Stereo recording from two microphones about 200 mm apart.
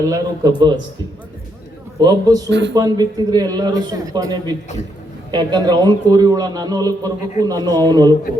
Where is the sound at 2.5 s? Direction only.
65° right (ahead or behind).